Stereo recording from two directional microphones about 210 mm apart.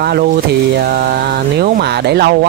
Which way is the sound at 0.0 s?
45° right (ahead or behind).